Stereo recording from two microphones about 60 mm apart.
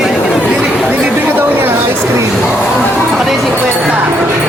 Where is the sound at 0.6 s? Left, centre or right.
Centre.